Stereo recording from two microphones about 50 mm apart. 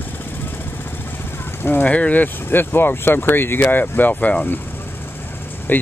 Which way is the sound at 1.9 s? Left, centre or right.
Left.